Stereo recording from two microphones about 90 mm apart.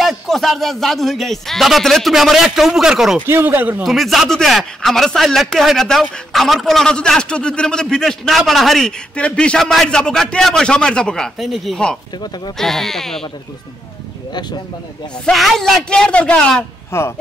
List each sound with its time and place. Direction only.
0.0 s a man's voice: centre (ahead or behind)
3.3 s speech: 25° right (ahead or behind)
3.8 s a man's voice: centre (ahead or behind)
9.1 s a man's voice: 15° left (ahead or behind)
15.3 s a man's voice: centre (ahead or behind)
16.9 s speech: 30° left (ahead or behind)